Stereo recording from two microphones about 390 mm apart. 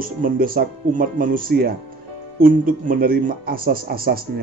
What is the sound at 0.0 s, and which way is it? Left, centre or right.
Speech, right.